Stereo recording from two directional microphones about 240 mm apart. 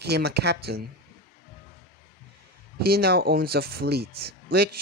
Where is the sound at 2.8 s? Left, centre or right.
Right.